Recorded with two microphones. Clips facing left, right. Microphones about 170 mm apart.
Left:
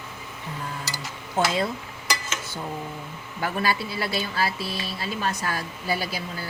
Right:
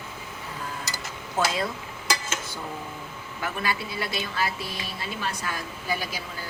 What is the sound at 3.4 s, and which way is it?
A woman's voice, 35° left (ahead or behind).